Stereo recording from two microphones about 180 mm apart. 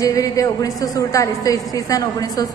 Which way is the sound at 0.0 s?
20° left (ahead or behind).